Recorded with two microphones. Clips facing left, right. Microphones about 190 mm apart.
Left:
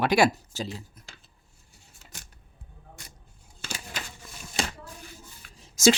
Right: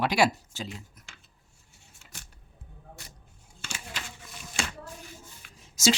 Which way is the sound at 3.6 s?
35° left (ahead or behind).